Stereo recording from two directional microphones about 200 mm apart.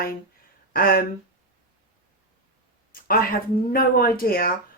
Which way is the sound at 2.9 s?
45° left (ahead or behind).